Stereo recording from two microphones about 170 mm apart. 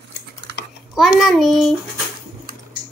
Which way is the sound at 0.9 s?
Centre (ahead or behind).